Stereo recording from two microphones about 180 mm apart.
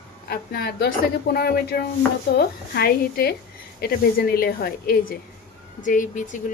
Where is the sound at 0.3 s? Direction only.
60° left (ahead or behind).